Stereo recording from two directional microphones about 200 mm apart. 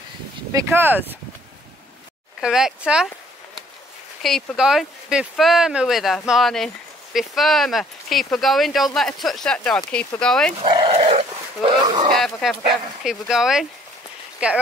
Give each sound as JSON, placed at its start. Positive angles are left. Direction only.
{"t": 0.5, "sound": "speech", "side_deg": -15}
{"t": 2.4, "sound": "speech", "side_deg": -5}
{"t": 4.2, "sound": "speech", "side_deg": 0}
{"t": 10.6, "sound": "speech", "side_deg": -25}
{"t": 12.2, "sound": "speech", "side_deg": 0}